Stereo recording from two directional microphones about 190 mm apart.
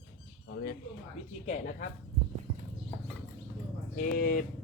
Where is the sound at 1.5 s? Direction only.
40° left (ahead or behind).